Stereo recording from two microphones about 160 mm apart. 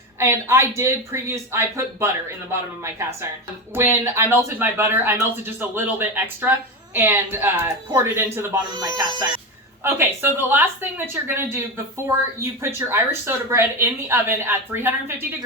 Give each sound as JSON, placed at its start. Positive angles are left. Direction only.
{"t": 0.2, "sound": "a woman's voice", "side_deg": -15}
{"t": 9.0, "sound": "speech", "side_deg": -25}
{"t": 9.8, "sound": "a woman's voice", "side_deg": -15}